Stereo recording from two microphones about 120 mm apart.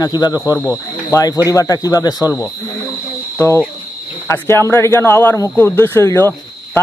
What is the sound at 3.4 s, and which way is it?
Speech, 20° left (ahead or behind).